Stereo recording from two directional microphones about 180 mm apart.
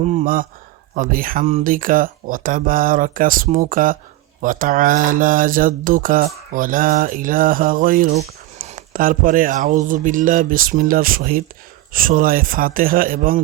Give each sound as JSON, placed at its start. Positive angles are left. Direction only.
{"t": 0.0, "sound": "speech", "side_deg": -45}
{"t": 0.9, "sound": "mantra", "side_deg": -50}